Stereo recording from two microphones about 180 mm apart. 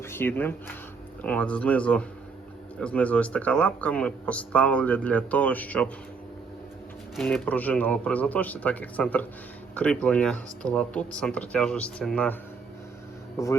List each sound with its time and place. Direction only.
0.0 s speech: 15° left (ahead or behind)
7.2 s speech: 5° left (ahead or behind)
13.4 s speech: 15° left (ahead or behind)